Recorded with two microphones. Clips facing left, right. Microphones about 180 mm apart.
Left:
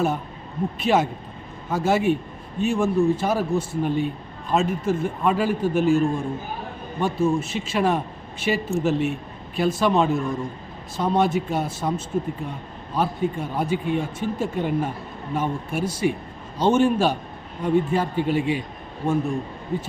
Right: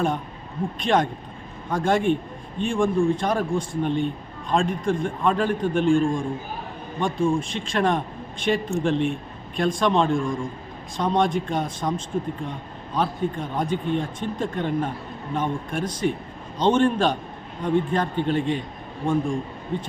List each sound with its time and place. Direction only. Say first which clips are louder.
0.8 s a man's voice: left 1 dB; 5° left (ahead or behind)